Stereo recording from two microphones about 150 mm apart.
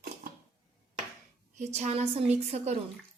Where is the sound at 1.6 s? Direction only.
50° right (ahead or behind).